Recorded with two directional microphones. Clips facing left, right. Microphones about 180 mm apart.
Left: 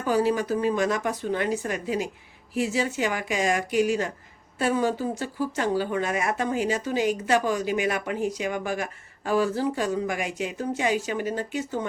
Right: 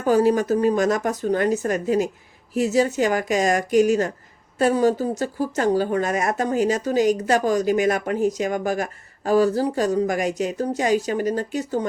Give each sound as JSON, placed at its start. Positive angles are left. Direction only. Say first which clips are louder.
{"t": 0.0, "sound": "speech", "louder": "right 5 dB", "side_deg": -45}